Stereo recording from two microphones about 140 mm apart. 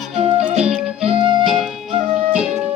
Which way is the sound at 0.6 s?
5° right (ahead or behind).